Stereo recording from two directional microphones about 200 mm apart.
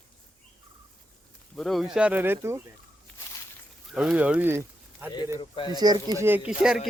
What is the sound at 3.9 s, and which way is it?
Speech, centre (ahead or behind).